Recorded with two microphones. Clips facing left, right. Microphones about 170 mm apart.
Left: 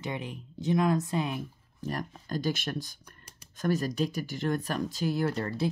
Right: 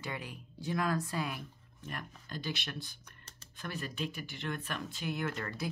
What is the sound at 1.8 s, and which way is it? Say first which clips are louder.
Speech: left 9 dB; 35° left (ahead or behind).